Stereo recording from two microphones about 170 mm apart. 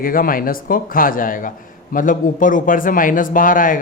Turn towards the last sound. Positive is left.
turn(degrees=50)  # may be behind; listen again after turning